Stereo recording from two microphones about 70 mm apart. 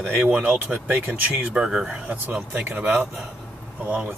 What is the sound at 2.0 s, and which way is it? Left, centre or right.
Speech, right.